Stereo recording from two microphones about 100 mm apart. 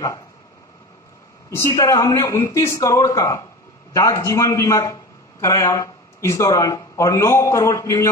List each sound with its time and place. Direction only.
1.5 s a man's voice: 30° left (ahead or behind)